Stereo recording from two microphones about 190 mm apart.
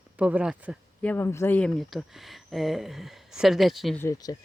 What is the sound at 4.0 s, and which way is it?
Speech, 15° left (ahead or behind).